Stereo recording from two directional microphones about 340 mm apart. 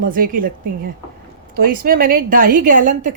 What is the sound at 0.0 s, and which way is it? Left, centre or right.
Speech, right.